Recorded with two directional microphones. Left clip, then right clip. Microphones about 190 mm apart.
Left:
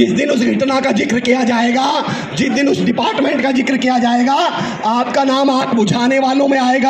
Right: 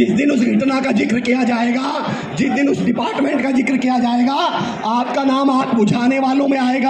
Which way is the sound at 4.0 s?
45° left (ahead or behind).